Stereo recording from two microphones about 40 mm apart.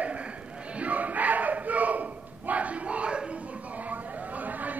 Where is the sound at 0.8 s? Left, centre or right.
Right.